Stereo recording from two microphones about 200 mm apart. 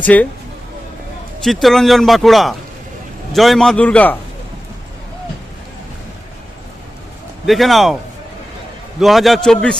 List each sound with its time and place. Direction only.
0.0 s speech: 10° left (ahead or behind)
1.6 s a man's voice: centre (ahead or behind)
7.4 s a man's voice: centre (ahead or behind)
9.0 s a man's voice: centre (ahead or behind)